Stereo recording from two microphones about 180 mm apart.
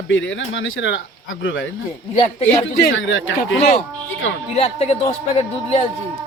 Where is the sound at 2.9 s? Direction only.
90° left.